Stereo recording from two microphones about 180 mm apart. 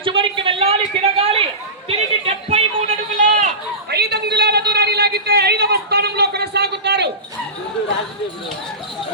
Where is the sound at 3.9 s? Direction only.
65° right (ahead or behind).